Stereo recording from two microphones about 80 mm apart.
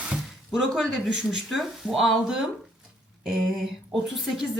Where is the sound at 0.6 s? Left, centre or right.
Centre.